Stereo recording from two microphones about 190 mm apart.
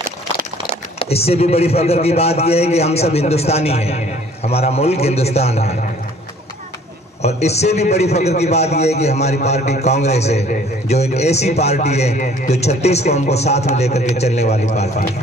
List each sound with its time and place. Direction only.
0.7 s speech: 30° left (ahead or behind)
7.2 s speech: 35° left (ahead or behind)